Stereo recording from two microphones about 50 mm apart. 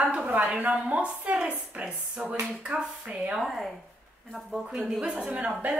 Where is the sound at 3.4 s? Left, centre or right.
Centre.